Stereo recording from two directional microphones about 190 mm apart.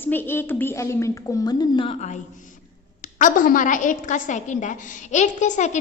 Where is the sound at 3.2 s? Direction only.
45° left (ahead or behind).